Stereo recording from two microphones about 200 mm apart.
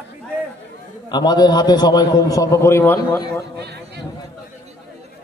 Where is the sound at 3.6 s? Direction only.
55° right (ahead or behind).